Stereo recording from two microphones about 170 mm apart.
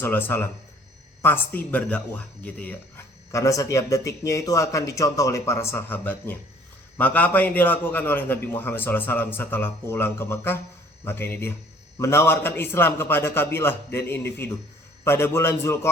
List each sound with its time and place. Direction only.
0.0 s a man's voice: 10° left (ahead or behind)